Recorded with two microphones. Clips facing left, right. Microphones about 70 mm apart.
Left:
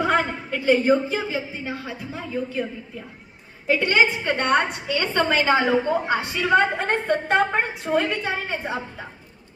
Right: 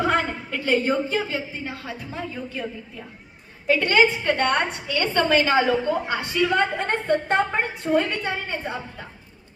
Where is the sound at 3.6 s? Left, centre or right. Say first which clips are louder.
Right 1 dB; centre.